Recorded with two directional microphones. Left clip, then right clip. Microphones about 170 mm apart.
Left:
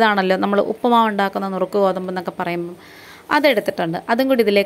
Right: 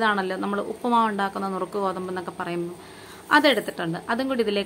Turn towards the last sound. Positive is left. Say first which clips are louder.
# left 9 dB
turn(degrees=35)  # may be behind; listen again after turning